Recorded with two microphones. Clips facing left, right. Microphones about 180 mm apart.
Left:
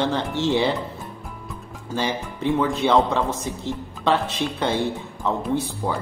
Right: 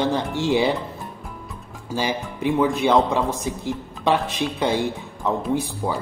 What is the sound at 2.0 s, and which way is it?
Speech, 10° right (ahead or behind).